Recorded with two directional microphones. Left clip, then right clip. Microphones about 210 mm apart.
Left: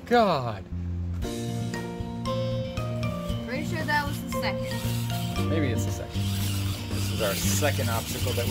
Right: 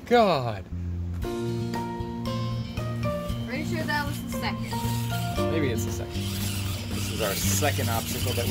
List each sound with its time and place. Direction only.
0.1 s speech: 10° right (ahead or behind)
3.5 s speech: 45° left (ahead or behind)
5.5 s speech: centre (ahead or behind)
7.2 s speech: centre (ahead or behind)